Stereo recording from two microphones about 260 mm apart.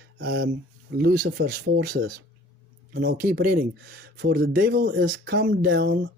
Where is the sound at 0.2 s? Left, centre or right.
Right.